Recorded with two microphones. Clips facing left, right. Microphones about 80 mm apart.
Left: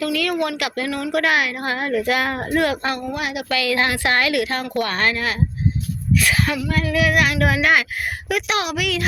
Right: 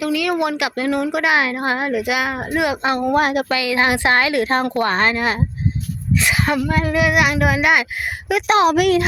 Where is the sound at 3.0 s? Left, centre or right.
Right.